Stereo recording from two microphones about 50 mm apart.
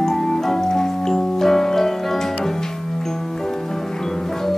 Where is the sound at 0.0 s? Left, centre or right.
Centre.